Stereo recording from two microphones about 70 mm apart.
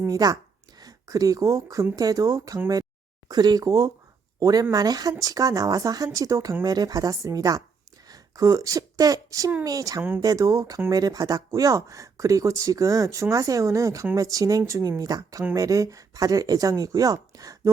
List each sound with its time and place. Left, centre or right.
0.1 s speech: right
3.2 s speech: right
17.3 s a sound: right